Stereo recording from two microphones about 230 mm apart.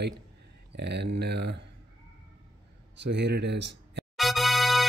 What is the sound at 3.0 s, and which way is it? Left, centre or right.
Speech, right.